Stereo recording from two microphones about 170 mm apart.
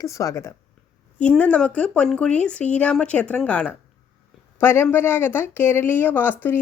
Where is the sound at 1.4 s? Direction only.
5° left (ahead or behind).